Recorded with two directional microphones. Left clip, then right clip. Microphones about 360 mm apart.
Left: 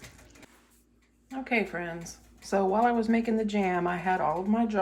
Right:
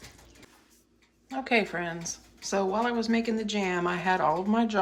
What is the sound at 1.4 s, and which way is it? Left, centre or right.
Speech, centre.